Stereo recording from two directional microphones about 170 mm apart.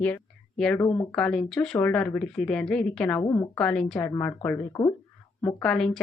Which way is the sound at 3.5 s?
5° left (ahead or behind).